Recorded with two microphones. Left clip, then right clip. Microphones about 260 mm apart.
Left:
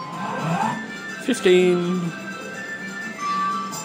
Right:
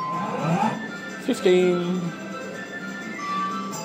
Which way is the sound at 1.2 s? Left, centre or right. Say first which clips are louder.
Left 2 dB; centre.